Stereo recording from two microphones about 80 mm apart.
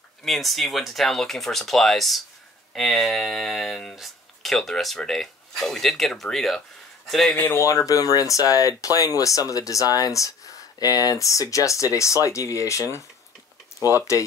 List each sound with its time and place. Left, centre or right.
0.2 s speech: centre
7.5 s speech: left